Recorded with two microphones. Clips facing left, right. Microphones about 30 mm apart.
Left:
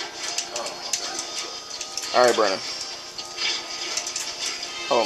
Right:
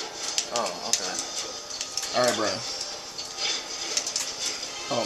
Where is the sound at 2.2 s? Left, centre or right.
Left.